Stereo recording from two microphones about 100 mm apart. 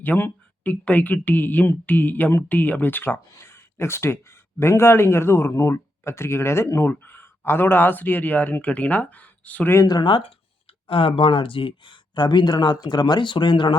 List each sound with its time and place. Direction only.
0.0 s speech: 15° left (ahead or behind)
9.8 s speech: 50° left (ahead or behind)